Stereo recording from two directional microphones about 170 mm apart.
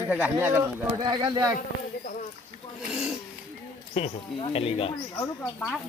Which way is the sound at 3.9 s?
35° left (ahead or behind).